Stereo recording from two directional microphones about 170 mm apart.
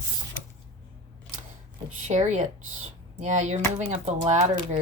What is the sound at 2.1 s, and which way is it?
Speech, 40° right (ahead or behind).